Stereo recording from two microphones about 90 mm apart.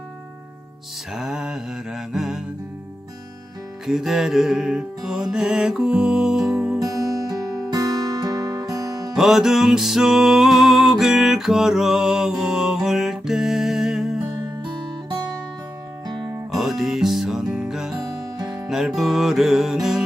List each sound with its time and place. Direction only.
1.1 s mantra: 5° right (ahead or behind)
3.8 s music: 5° right (ahead or behind)
6.8 s music: 40° right (ahead or behind)
9.1 s music: 5° right (ahead or behind)
16.5 s music: 5° right (ahead or behind)